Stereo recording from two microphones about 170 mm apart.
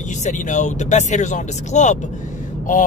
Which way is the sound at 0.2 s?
45° left (ahead or behind).